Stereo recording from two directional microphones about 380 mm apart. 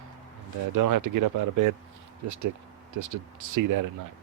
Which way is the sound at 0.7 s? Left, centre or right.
Right.